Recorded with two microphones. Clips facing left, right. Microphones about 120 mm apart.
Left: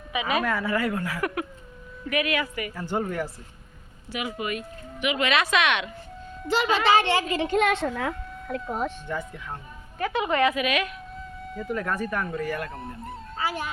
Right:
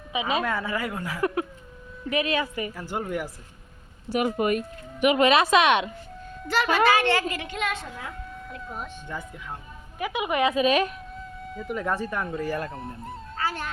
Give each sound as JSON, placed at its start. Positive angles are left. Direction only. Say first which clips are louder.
{"t": 0.1, "sound": "speech", "louder": "even", "side_deg": -25}
{"t": 2.7, "sound": "speech", "louder": "left 5 dB", "side_deg": -10}
{"t": 4.1, "sound": "speech", "louder": "right 7 dB", "side_deg": -45}
{"t": 6.5, "sound": "a woman's voice", "louder": "even", "side_deg": 20}
{"t": 7.6, "sound": "speech", "louder": "left 7 dB", "side_deg": 70}
{"t": 8.6, "sound": "speech", "louder": "left 8 dB", "side_deg": 90}
{"t": 10.0, "sound": "speech", "louder": "left 1 dB", "side_deg": -10}
{"t": 10.5, "sound": "speech", "louder": "right 4 dB", "side_deg": -30}
{"t": 11.1, "sound": "a sound", "louder": "even", "side_deg": 0}
{"t": 11.7, "sound": "speech", "louder": "even", "side_deg": -20}
{"t": 12.7, "sound": "speech", "louder": "even", "side_deg": 0}
{"t": 13.3, "sound": "music", "louder": "left 1 dB", "side_deg": 10}